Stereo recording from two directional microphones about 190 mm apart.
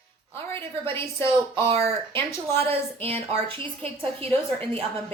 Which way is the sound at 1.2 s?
30° right (ahead or behind).